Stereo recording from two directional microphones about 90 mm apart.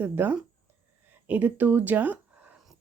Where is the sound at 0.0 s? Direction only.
25° right (ahead or behind).